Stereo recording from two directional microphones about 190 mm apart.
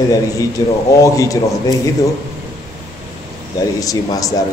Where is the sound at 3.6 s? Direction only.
20° left (ahead or behind).